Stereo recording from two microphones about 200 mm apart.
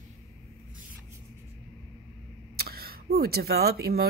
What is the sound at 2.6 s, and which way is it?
Speech, 50° right (ahead or behind).